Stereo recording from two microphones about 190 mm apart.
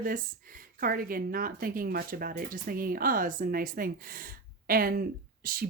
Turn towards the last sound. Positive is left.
turn(degrees=-50)  # may be behind; listen again after turning